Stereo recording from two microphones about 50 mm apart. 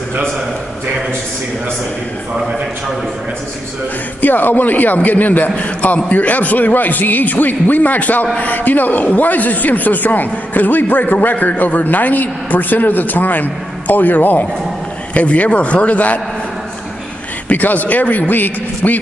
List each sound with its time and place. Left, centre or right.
4.2 s a man's voice: left
17.5 s speech: left